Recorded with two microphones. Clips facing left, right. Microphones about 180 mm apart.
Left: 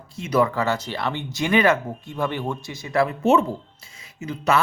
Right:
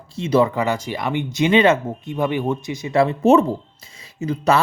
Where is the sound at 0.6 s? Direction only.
15° right (ahead or behind).